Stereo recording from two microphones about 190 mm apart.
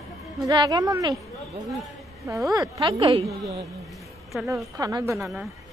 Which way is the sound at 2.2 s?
15° right (ahead or behind).